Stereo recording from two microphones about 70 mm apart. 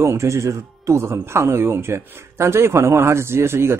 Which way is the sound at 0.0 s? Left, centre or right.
Right.